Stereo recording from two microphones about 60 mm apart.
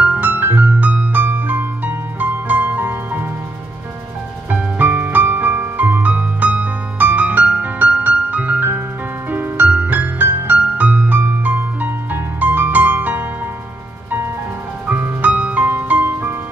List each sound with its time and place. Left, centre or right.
0.0 s music: right
0.3 s music: right
4.5 s music: right
14.9 s music: right